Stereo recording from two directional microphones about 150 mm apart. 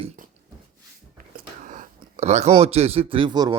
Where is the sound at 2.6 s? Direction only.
40° right (ahead or behind).